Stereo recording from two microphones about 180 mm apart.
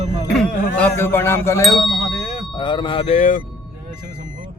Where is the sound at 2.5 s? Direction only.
25° left (ahead or behind); by 3.4 s 45° left (ahead or behind).